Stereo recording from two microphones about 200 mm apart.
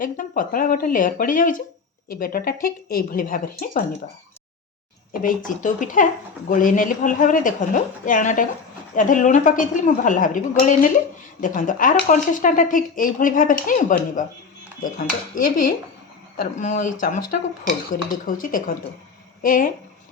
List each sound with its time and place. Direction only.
0.0 s speech: 40° left (ahead or behind)
5.1 s speech: 45° left (ahead or behind)